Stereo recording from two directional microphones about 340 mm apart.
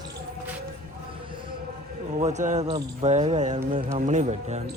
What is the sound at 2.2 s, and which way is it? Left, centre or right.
A man's voice, centre.